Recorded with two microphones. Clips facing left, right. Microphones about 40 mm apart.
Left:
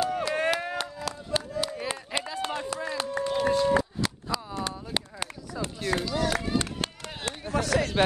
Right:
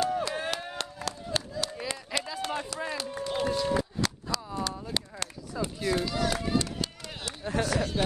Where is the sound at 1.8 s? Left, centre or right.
Left.